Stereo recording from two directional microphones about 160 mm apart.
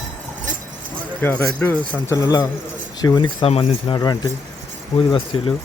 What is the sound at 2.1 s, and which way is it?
Speech, 20° left (ahead or behind).